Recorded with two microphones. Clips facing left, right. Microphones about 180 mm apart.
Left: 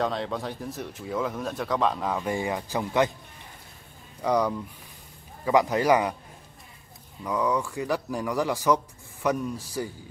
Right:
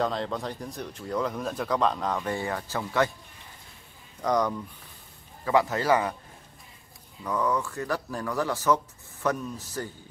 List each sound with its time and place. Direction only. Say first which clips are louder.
0.0 s speech: even; centre (ahead or behind); by 3.1 s 15° left (ahead or behind)
4.2 s speech: left 1 dB; 10° left (ahead or behind)
7.2 s speech: left 1 dB; 10° left (ahead or behind)